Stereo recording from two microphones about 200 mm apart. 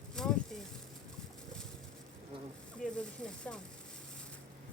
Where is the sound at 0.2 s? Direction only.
Centre (ahead or behind).